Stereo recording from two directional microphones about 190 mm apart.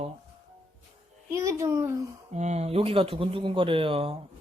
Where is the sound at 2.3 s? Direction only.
35° right (ahead or behind).